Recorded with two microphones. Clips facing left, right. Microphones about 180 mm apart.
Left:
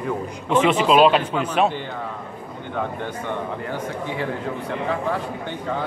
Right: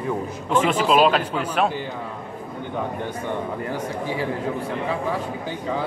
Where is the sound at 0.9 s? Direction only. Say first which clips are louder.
Left 2 dB; 5° right (ahead or behind).